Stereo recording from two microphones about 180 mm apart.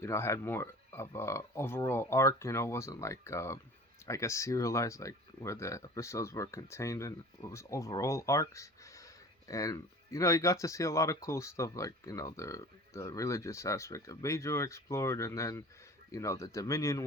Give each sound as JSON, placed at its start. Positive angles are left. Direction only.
{"t": 0.0, "sound": "speech", "side_deg": 15}